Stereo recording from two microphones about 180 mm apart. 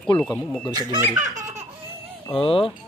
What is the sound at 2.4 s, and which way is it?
Speech, 30° left (ahead or behind).